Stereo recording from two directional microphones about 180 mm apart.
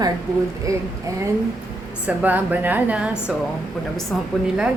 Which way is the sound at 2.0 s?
10° right (ahead or behind).